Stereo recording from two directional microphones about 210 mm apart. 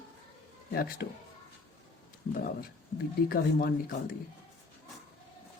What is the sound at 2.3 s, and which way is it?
Speech, 45° left (ahead or behind).